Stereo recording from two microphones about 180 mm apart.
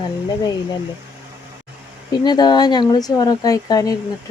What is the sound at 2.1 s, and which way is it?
Speech, 25° left (ahead or behind).